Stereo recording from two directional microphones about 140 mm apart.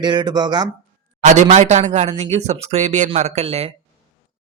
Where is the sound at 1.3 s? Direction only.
60° right (ahead or behind).